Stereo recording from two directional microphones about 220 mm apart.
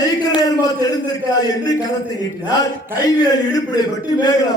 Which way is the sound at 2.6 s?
15° left (ahead or behind).